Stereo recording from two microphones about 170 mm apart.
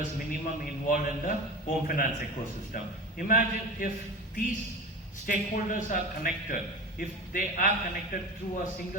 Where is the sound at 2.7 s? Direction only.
55° left (ahead or behind).